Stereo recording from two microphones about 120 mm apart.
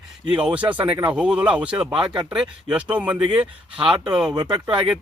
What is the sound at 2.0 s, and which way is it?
Speech, 40° right (ahead or behind).